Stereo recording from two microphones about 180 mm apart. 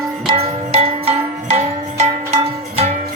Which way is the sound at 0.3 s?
35° right (ahead or behind).